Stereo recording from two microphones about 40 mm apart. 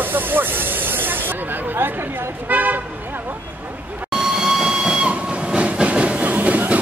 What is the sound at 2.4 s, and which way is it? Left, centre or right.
Speech, right.